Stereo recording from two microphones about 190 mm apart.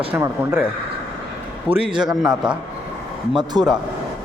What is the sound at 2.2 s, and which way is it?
Speech, 5° right (ahead or behind).